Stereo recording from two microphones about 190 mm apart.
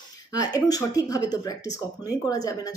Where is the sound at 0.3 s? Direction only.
20° left (ahead or behind).